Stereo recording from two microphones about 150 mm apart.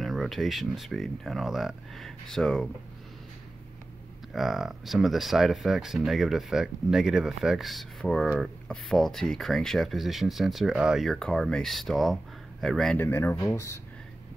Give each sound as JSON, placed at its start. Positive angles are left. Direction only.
{"t": 0.0, "sound": "speech", "side_deg": 0}
{"t": 4.3, "sound": "speech", "side_deg": 0}
{"t": 13.0, "sound": "speech", "side_deg": 15}